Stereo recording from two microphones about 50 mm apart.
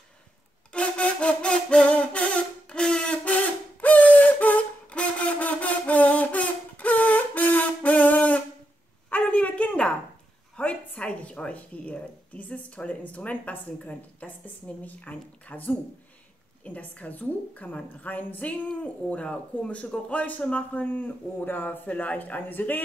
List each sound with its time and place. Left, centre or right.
0.7 s wind instrument: left
3.3 s a sound: left
16.6 s a woman's voice: left
20.8 s a man's voice: left